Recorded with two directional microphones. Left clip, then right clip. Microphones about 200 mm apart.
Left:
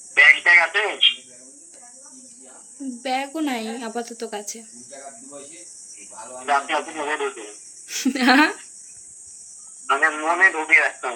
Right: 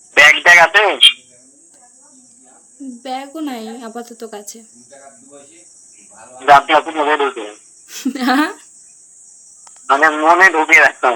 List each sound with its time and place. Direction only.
0.1 s radio: 50° right (ahead or behind)
3.0 s speech: 10° right (ahead or behind)
6.4 s speech: 50° right (ahead or behind)
7.9 s speech: 10° right (ahead or behind)
9.8 s speech: 55° right (ahead or behind)